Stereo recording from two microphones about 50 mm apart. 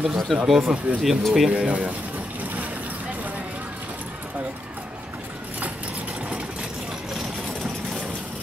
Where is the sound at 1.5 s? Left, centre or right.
Right.